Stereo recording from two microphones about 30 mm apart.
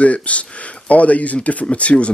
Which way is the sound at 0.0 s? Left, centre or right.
Left.